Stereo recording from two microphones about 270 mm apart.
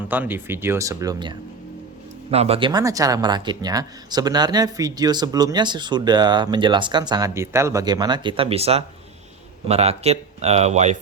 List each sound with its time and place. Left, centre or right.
0.1 s speech: centre; by 10.9 s right